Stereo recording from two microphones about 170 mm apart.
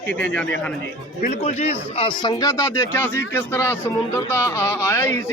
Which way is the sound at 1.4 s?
40° left (ahead or behind).